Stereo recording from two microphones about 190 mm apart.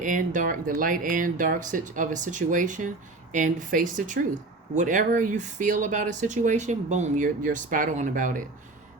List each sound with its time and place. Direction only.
0.0 s speech: 45° right (ahead or behind)